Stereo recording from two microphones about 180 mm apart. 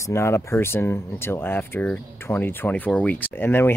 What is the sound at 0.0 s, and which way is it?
Speech, 15° left (ahead or behind).